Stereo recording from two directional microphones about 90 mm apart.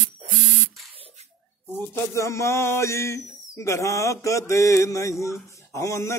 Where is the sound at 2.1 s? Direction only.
35° left (ahead or behind).